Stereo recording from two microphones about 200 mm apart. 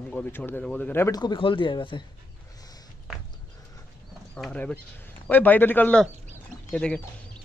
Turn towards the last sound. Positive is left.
turn(degrees=5)  # may be behind; listen again after turning